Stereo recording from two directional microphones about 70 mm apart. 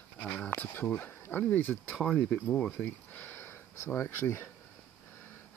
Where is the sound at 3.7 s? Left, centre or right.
Left.